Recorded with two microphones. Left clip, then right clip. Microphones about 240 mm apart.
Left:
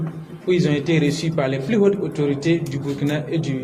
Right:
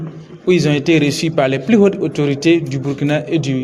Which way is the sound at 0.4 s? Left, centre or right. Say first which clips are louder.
Right 6 dB; right.